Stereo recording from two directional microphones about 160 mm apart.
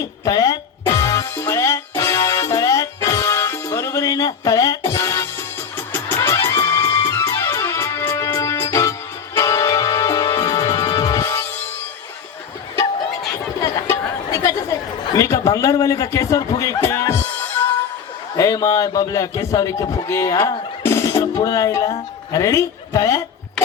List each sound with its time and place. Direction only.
0.3 s a man's voice: 25° left (ahead or behind)
0.9 s music: 20° left (ahead or behind)
13.6 s a sound: 20° left (ahead or behind)
15.1 s a man's voice: 20° left (ahead or behind)
20.8 s music: 15° left (ahead or behind)
22.3 s speech: 20° left (ahead or behind)